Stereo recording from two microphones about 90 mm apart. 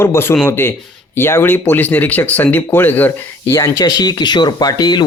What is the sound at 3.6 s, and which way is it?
Speech, 40° left (ahead or behind).